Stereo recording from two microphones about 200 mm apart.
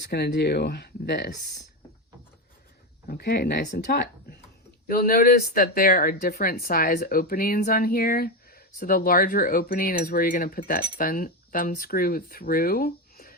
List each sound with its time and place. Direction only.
0.1 s speech: 55° left (ahead or behind)
3.1 s speech: 55° left (ahead or behind)